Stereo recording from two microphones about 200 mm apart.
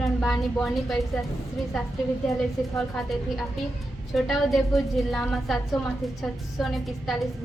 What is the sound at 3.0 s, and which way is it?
A woman's voice, centre (ahead or behind).